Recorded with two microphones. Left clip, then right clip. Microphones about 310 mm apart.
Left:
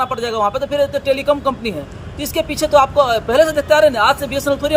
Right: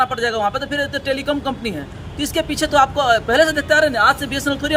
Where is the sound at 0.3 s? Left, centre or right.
Right.